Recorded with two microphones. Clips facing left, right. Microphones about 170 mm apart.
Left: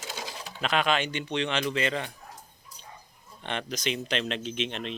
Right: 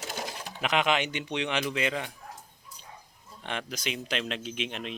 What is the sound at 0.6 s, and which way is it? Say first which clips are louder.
Speech: even; 20° right (ahead or behind).